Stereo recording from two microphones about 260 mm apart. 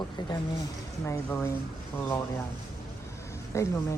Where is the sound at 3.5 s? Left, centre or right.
Centre.